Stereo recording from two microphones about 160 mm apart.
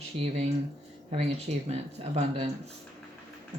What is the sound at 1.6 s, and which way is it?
Speech, 40° right (ahead or behind).